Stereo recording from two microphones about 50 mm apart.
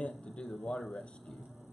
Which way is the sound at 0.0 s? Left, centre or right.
Left.